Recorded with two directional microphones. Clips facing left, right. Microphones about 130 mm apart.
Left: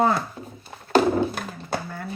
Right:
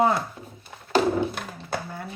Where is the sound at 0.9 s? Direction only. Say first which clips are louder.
Left 3 dB; 40° left (ahead or behind).